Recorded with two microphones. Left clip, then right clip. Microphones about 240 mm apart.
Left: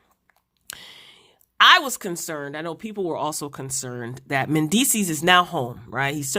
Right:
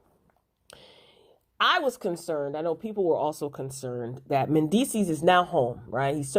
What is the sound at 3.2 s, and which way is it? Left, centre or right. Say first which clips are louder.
Speech: left 1 dB; left.